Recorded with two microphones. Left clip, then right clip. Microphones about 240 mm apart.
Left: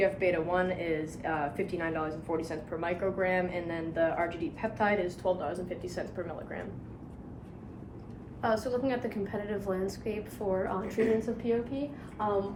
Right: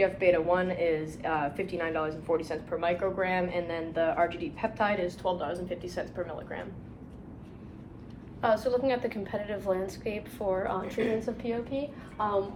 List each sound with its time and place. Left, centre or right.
0.0 s a woman's voice: centre
8.4 s a woman's voice: centre